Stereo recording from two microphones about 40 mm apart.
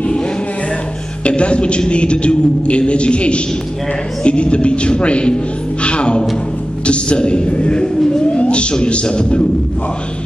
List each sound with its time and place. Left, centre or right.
1.2 s a man's voice: left